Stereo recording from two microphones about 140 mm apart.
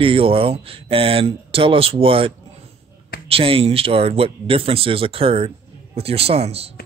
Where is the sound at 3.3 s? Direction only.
40° right (ahead or behind).